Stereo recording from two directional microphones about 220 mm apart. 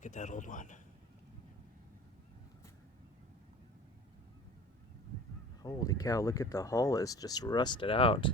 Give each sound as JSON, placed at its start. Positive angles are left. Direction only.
{"t": 0.0, "sound": "speech", "side_deg": 35}
{"t": 5.6, "sound": "speech", "side_deg": 15}